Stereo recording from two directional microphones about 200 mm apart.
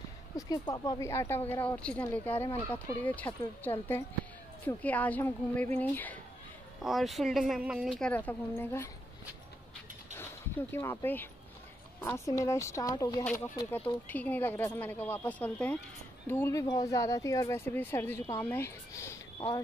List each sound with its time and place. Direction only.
0.4 s speech: 20° left (ahead or behind)
10.1 s speech: 10° left (ahead or behind)